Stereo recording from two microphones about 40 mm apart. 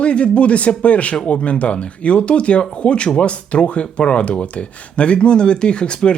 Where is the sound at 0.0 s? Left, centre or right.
Left.